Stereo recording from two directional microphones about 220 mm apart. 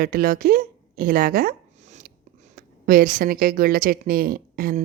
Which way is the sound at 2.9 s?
40° right (ahead or behind).